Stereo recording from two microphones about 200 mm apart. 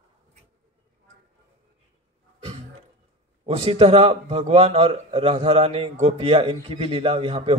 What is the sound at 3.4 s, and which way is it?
A man's voice, 30° right (ahead or behind).